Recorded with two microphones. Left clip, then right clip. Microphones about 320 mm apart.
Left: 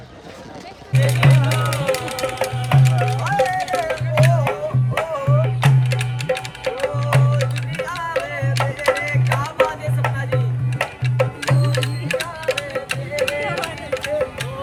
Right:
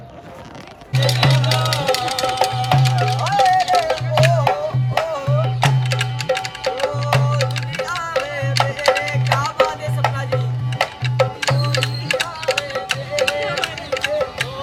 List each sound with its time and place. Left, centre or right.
0.9 s music: right
8.8 s music: right
11.4 s music: right